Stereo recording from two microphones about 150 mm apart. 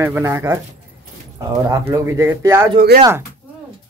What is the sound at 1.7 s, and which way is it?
Speech, 20° right (ahead or behind).